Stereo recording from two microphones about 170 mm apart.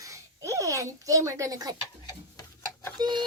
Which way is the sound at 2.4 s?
20° left (ahead or behind).